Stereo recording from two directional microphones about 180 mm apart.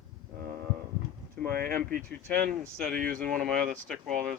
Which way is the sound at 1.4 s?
55° right (ahead or behind).